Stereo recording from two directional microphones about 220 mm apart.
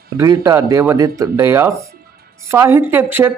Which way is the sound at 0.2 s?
15° right (ahead or behind).